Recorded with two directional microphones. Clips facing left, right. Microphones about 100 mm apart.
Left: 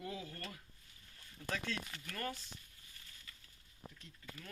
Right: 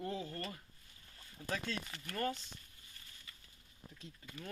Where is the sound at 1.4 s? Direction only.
15° right (ahead or behind).